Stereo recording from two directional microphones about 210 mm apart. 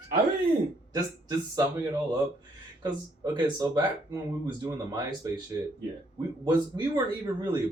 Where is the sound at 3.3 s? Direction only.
20° right (ahead or behind).